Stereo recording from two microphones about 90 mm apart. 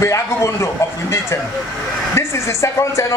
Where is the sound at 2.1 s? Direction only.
30° left (ahead or behind).